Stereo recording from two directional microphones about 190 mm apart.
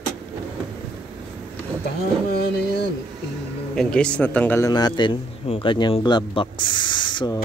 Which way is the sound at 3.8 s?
5° left (ahead or behind).